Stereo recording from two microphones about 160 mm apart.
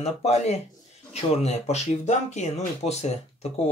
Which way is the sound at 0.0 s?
45° left (ahead or behind).